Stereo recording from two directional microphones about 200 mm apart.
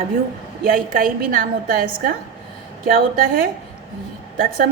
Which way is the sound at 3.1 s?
45° right (ahead or behind).